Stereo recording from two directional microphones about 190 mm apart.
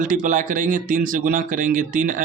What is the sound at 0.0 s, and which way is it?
Speech, 45° right (ahead or behind).